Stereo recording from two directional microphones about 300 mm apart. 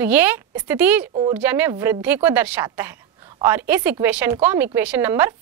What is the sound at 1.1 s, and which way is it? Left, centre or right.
Speech, centre.